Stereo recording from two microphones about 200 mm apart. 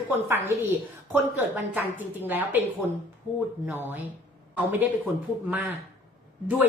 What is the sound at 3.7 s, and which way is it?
A woman's voice, 10° right (ahead or behind).